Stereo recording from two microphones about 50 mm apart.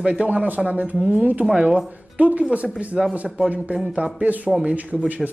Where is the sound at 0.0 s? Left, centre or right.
Right.